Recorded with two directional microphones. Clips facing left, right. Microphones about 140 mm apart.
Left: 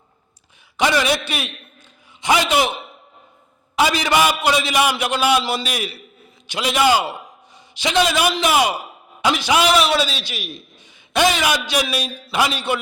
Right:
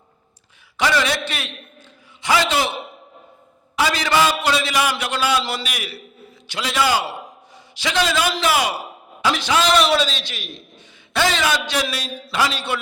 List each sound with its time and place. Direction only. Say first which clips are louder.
0.8 s a man's voice: left 2 dB; 20° left (ahead or behind)
3.8 s a man's voice: left 1 dB; 15° left (ahead or behind)
5.6 s a man's voice: left 5 dB; 30° left (ahead or behind)
6.5 s a man's voice: left 3 dB; 15° left (ahead or behind)